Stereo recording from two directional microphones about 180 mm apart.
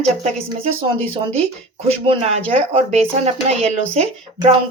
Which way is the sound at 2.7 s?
35° right (ahead or behind).